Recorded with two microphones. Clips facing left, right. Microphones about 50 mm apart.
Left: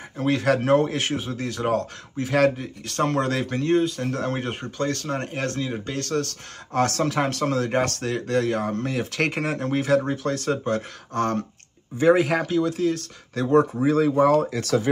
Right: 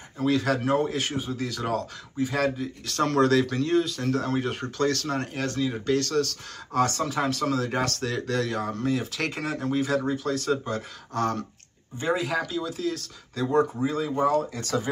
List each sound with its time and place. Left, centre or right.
0.2 s speech: left
1.3 s speech: left
2.1 s speech: left
3.0 s speech: left
5.2 s speech: left
5.7 s speech: left
6.8 s speech: left
7.2 s speech: left
13.8 s speech: left